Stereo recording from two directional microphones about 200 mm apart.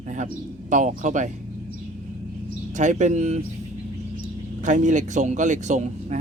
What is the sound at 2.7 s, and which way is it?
Speech, 40° right (ahead or behind).